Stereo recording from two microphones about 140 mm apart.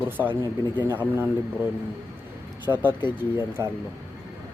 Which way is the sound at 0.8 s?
15° right (ahead or behind).